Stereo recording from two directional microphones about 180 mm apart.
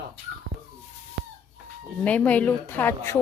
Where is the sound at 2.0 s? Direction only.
5° left (ahead or behind).